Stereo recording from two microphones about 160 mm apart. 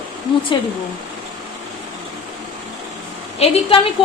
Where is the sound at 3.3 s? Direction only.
35° left (ahead or behind).